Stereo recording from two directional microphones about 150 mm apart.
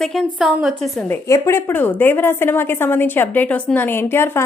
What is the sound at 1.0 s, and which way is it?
A woman's voice, 15° left (ahead or behind).